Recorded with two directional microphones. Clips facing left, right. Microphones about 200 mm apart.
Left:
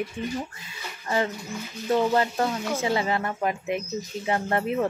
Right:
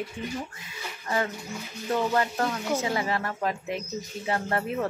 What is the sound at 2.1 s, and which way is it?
A woman's voice, 25° left (ahead or behind).